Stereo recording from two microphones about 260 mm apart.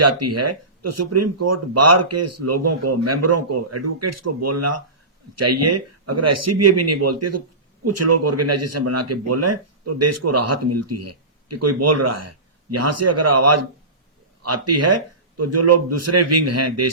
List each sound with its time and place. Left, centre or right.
0.0 s speech: right